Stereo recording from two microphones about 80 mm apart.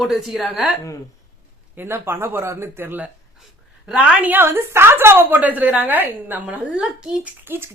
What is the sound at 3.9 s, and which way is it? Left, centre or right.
Speech, centre.